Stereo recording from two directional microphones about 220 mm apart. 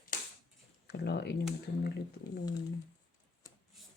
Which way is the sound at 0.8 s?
50° left (ahead or behind).